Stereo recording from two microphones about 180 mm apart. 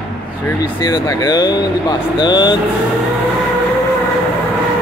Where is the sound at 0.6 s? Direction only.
20° left (ahead or behind).